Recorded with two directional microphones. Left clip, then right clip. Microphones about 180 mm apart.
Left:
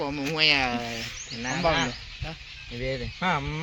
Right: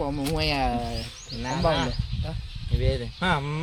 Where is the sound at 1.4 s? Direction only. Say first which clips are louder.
Even; 75° right (ahead or behind).